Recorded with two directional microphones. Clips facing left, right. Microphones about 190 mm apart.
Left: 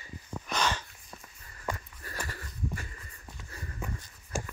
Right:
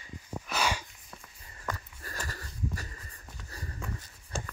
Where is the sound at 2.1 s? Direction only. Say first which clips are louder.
Left 1 dB; 40° right (ahead or behind).